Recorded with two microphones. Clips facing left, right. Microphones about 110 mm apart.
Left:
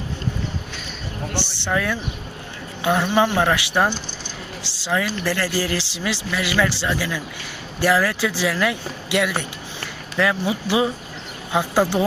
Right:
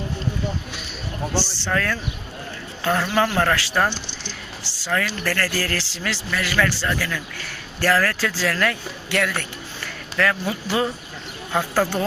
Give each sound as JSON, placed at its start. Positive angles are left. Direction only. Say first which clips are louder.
{"t": 1.4, "sound": "speech", "louder": "left 1 dB", "side_deg": 15}